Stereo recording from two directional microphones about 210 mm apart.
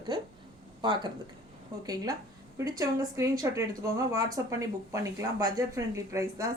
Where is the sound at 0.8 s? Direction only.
20° right (ahead or behind).